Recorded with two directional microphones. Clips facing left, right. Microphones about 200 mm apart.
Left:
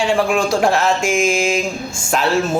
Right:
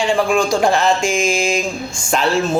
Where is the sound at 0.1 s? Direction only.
5° left (ahead or behind).